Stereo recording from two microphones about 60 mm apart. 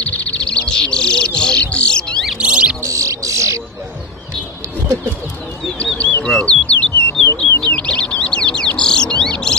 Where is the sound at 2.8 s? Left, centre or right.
Right.